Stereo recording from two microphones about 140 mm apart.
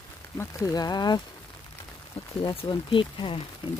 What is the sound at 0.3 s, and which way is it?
Speech, 25° left (ahead or behind).